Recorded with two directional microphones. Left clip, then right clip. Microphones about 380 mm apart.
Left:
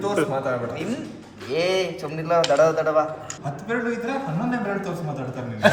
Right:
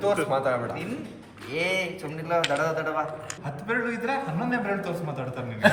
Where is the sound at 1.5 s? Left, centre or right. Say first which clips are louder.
Left 5 dB; left.